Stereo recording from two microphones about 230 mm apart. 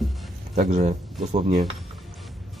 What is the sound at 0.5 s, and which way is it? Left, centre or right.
Speech, right.